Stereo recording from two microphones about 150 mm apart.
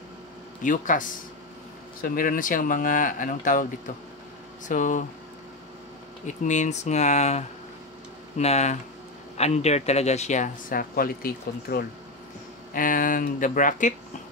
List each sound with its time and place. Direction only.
0.6 s speech: 60° left (ahead or behind)
4.6 s speech: 60° left (ahead or behind)
6.2 s speech: 55° left (ahead or behind); by 11.8 s 80° left
12.7 s speech: 65° left (ahead or behind)